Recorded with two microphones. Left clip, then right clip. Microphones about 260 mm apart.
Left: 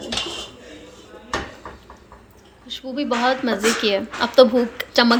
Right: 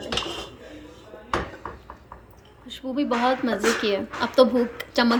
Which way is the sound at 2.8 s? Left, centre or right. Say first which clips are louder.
Left 2 dB; centre.